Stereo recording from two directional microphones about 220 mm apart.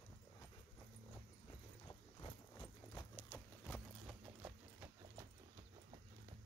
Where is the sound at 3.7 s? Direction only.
5° right (ahead or behind).